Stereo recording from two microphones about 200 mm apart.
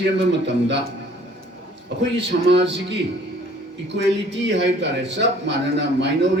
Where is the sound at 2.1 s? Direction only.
60° right (ahead or behind).